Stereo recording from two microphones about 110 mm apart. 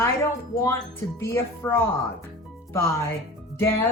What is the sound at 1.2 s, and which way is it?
Music, 25° left (ahead or behind).